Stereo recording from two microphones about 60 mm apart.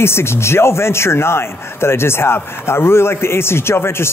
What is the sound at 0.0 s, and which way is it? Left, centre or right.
Speech, left.